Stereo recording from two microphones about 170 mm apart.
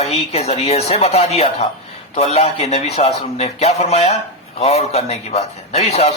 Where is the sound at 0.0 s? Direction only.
40° left (ahead or behind).